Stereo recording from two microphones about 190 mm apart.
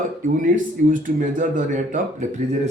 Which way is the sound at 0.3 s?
45° right (ahead or behind).